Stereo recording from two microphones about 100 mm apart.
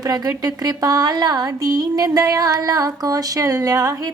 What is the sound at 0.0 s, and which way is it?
Speech, 35° right (ahead or behind).